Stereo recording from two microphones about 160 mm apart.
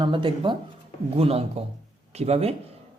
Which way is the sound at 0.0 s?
30° right (ahead or behind).